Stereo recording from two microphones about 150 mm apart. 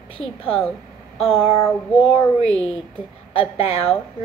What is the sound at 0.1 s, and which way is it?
A woman's voice, 40° left (ahead or behind).